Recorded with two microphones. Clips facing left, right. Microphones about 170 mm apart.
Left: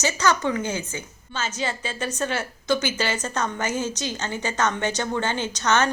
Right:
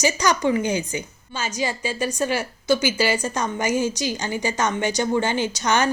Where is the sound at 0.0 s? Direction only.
15° right (ahead or behind).